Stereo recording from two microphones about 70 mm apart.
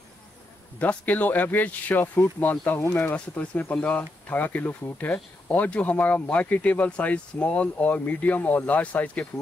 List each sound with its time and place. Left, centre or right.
0.7 s speech: left